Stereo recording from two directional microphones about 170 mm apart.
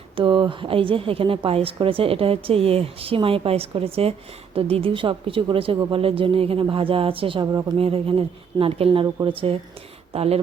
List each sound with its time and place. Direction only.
0.2 s a woman's voice: 30° right (ahead or behind)